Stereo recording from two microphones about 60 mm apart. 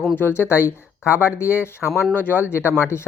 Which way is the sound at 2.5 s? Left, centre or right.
Left.